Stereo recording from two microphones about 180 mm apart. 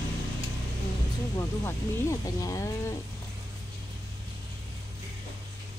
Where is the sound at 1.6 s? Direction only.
20° left (ahead or behind).